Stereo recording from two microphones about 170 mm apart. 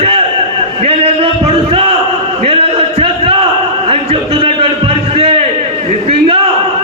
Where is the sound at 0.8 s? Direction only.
35° right (ahead or behind).